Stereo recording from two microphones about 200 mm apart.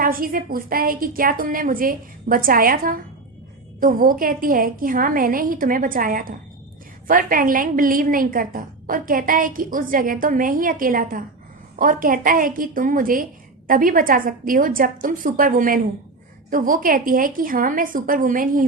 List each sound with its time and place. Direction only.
0.0 s a woman's voice: 45° right (ahead or behind)